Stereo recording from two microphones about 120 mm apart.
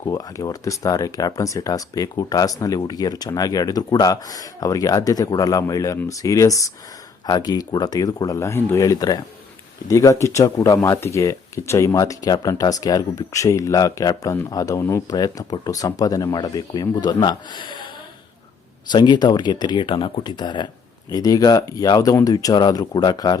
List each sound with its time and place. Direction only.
0.0 s speech: 30° left (ahead or behind)
18.9 s speech: 40° left (ahead or behind)